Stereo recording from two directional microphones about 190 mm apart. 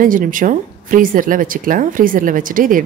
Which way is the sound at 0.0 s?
45° right (ahead or behind).